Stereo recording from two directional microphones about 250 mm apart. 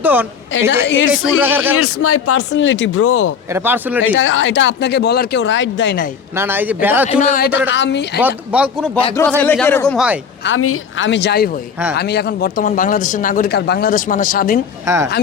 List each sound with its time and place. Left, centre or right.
0.0 s a woman's voice: centre
0.5 s speech: left
1.4 s speech: centre
1.7 s speech: left
3.5 s speech: centre
4.1 s speech: left
6.3 s speech: centre
7.1 s speech: left
8.2 s speech: centre
9.4 s speech: centre
10.4 s speech: left
14.8 s speech: centre